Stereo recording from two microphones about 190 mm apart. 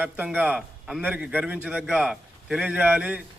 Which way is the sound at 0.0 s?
10° right (ahead or behind).